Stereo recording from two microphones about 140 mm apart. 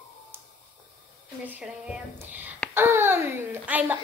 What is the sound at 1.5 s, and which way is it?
Child singing, 10° right (ahead or behind).